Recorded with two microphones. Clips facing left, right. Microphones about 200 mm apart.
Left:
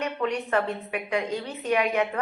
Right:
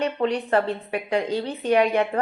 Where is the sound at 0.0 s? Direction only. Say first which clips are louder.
Right 4 dB; 30° right (ahead or behind).